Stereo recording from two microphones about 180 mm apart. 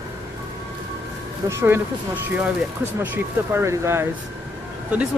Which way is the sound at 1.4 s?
15° right (ahead or behind).